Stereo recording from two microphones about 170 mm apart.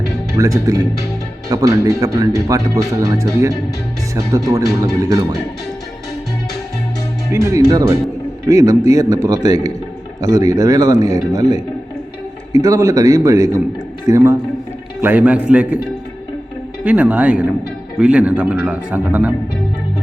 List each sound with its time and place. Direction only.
0.3 s speech: 20° right (ahead or behind)
7.3 s a man's voice: 15° right (ahead or behind)
16.8 s a man's voice: 10° right (ahead or behind)